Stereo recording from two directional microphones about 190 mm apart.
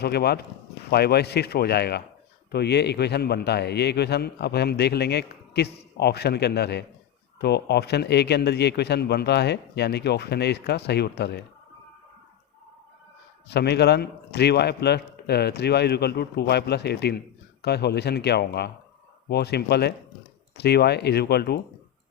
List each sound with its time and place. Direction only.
0.0 s a man's voice: 55° left (ahead or behind)
13.5 s a man's voice: 60° left (ahead or behind)